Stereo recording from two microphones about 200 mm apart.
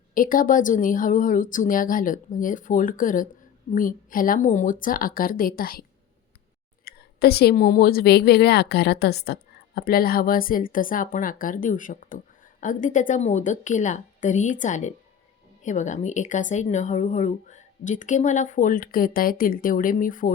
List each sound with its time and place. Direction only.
0.1 s a woman's voice: 45° left (ahead or behind)
6.8 s a woman's voice: 50° left (ahead or behind)